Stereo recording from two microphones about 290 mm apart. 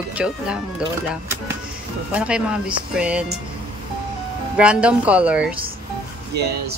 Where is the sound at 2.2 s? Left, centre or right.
Centre.